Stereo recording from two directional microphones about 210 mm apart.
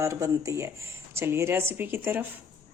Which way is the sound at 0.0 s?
15° right (ahead or behind).